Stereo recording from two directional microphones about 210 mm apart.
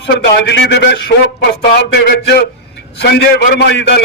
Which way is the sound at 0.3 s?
55° left (ahead or behind).